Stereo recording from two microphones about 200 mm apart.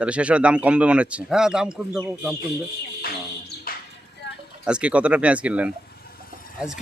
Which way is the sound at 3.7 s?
50° left (ahead or behind).